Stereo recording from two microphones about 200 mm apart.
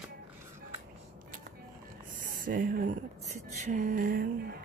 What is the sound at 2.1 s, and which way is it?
Speech, 45° right (ahead or behind).